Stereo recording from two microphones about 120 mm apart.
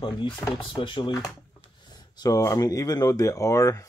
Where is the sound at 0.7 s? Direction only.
45° left (ahead or behind); by 3.9 s 25° left (ahead or behind).